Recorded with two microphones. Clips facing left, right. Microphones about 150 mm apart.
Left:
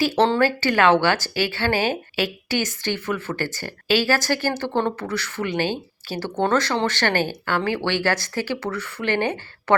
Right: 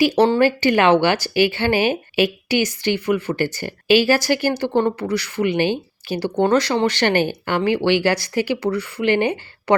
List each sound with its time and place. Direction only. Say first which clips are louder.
0.3 s a woman's voice: right 4 dB; 15° right (ahead or behind)